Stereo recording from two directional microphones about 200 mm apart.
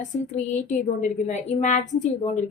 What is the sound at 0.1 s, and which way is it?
A woman's voice, 30° left (ahead or behind).